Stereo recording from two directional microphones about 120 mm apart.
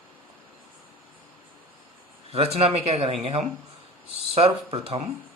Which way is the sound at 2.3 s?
55° right (ahead or behind).